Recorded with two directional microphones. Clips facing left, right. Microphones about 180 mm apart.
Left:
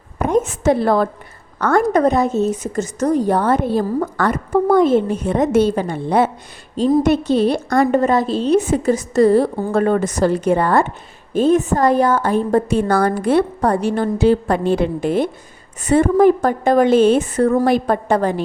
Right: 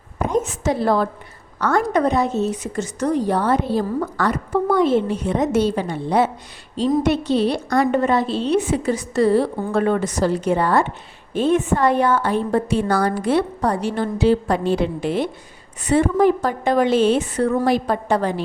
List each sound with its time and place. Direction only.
0.3 s a woman's voice: 55° left (ahead or behind)